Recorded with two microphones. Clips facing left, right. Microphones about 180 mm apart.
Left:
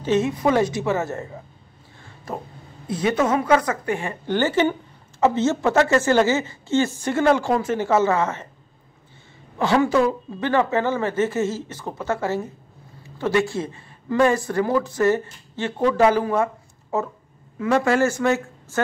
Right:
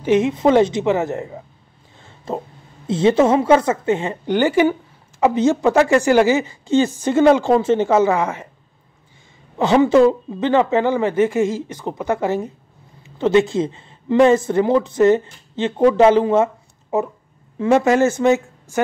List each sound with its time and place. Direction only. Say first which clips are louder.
0.0 s speech: right 5 dB; 15° right (ahead or behind)
9.6 s speech: right 6 dB; 20° right (ahead or behind)